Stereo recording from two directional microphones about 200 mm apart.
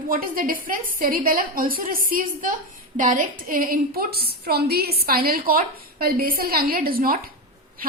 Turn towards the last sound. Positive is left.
turn(degrees=-45)  # may be behind; listen again after turning